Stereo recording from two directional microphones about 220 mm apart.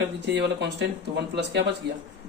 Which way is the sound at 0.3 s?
50° right (ahead or behind).